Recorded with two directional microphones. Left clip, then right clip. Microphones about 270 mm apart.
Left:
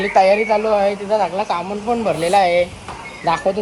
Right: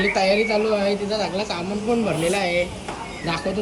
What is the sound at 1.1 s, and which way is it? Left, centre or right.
Speech, left.